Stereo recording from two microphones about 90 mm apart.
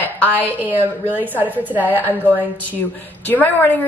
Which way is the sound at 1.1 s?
20° right (ahead or behind).